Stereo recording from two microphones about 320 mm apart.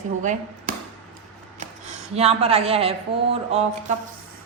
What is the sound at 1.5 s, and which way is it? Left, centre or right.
A woman's voice, right.